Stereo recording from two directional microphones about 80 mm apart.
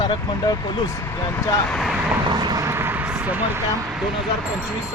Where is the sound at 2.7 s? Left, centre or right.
Right.